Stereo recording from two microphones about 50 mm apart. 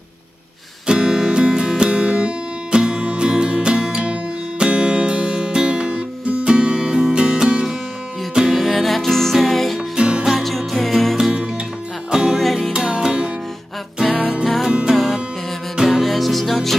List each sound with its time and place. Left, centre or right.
0.8 s music: centre
8.4 s music: centre
9.8 s music: centre
10.3 s music: centre
12.1 s music: centre
13.9 s music: centre
14.7 s music: centre
15.9 s music: centre